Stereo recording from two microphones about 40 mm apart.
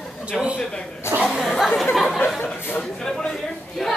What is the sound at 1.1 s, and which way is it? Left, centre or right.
Chatter, right.